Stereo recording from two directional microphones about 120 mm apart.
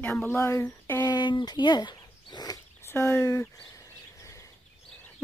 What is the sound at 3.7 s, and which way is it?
Bird, 25° left (ahead or behind).